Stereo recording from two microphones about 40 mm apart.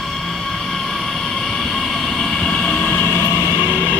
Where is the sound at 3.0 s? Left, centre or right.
Left.